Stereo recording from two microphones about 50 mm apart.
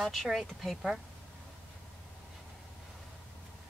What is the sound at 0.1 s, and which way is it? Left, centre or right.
Speech, centre.